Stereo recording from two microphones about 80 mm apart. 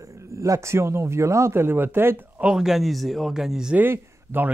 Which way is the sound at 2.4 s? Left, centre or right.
Centre.